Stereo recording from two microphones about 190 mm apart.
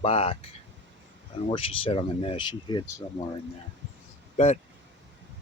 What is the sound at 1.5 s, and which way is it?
Speech, 30° left (ahead or behind).